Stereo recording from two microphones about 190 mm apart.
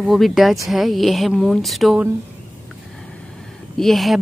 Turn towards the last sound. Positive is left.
turn(degrees=0)  # may be behind; listen again after turning